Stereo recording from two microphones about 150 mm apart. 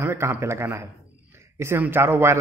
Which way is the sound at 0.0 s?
15° right (ahead or behind).